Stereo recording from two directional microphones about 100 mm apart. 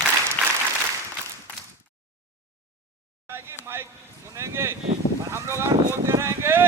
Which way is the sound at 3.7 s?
25° right (ahead or behind).